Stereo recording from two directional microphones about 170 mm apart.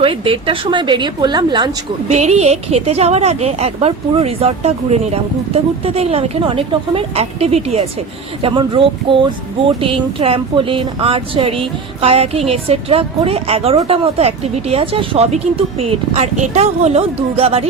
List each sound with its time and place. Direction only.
0.0 s a woman's voice: 30° right (ahead or behind)
2.0 s speech: 40° right (ahead or behind)